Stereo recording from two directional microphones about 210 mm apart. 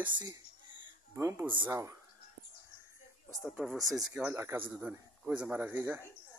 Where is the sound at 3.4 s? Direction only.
5° right (ahead or behind).